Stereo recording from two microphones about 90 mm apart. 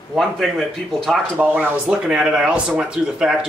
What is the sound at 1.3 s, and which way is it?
Speech, 20° right (ahead or behind).